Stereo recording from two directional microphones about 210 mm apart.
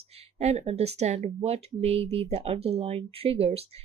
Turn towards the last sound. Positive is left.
turn(degrees=-30)  # may be behind; listen again after turning